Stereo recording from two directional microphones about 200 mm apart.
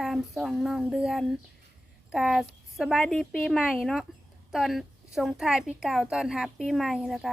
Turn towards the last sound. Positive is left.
turn(degrees=0)  # may be behind; listen again after turning